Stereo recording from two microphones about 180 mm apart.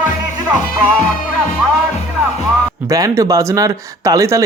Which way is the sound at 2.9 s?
20° right (ahead or behind).